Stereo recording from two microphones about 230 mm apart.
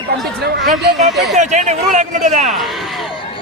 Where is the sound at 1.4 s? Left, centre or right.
Right.